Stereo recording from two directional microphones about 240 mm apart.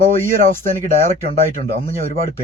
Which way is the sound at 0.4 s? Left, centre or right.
Right.